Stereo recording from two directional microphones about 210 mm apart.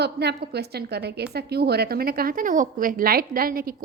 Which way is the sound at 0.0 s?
50° right (ahead or behind).